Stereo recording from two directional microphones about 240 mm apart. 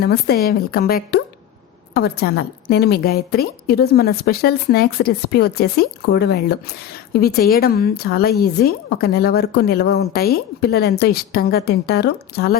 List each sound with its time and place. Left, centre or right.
0.0 s a woman's voice: left